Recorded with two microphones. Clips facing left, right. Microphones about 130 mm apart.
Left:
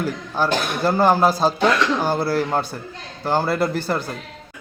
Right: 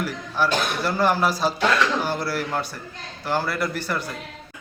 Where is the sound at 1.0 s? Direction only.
30° left (ahead or behind).